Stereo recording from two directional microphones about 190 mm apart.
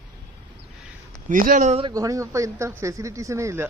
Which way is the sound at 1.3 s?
45° right (ahead or behind).